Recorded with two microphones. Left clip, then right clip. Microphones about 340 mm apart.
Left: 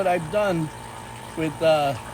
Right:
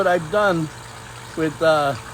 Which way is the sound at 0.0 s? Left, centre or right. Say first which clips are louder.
Right 4 dB; centre.